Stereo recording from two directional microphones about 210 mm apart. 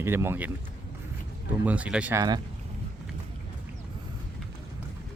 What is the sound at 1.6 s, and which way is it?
Speech, 5° right (ahead or behind).